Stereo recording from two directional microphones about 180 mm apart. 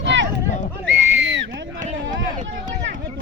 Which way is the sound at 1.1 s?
90° right.